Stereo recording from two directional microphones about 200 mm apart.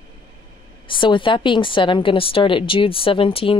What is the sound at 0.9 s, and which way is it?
A woman's voice, 25° left (ahead or behind).